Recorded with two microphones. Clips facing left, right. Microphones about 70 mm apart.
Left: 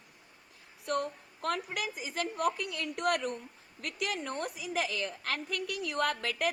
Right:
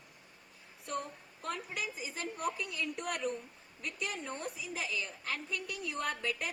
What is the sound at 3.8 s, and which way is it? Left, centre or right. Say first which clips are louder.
A woman's voice: left 4 dB; left.